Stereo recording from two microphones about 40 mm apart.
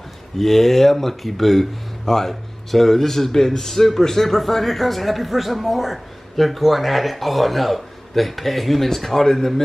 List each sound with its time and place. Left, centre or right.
0.4 s speech: centre